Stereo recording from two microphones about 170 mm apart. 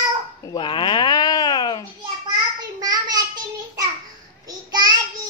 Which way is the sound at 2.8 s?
20° right (ahead or behind).